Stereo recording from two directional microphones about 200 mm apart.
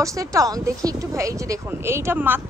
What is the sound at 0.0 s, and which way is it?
A woman's voice, 15° right (ahead or behind).